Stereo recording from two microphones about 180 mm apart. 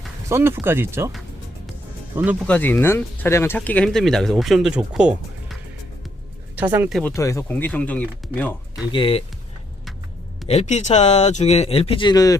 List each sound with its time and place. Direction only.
0.3 s speech: 15° right (ahead or behind)
2.1 s speech: 10° right (ahead or behind)
2.5 s speech: 10° left (ahead or behind); by 5.5 s 5° right (ahead or behind)
6.6 s speech: 10° right (ahead or behind)
7.0 s speech: 15° left (ahead or behind)
8.9 s speech: 30° left (ahead or behind)
10.5 s speech: 35° left (ahead or behind); by 12.4 s 20° left (ahead or behind)